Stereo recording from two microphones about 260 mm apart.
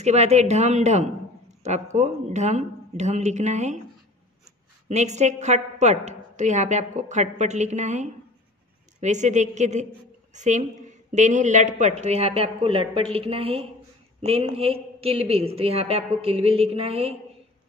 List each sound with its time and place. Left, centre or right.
0.0 s a woman's voice: right
4.8 s a woman's voice: right